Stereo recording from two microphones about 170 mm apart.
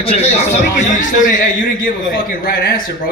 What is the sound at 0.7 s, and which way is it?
A man's voice, 50° left (ahead or behind).